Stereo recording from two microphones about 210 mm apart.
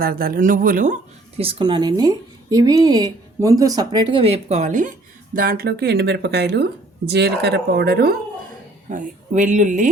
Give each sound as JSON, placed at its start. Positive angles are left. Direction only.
{"t": 0.0, "sound": "speech", "side_deg": -45}
{"t": 1.4, "sound": "speech", "side_deg": -25}
{"t": 8.9, "sound": "speech", "side_deg": -40}